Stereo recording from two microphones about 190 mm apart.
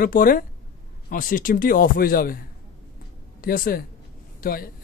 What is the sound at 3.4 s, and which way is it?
Speech, 50° left (ahead or behind).